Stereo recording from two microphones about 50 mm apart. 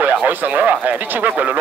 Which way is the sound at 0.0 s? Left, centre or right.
Right.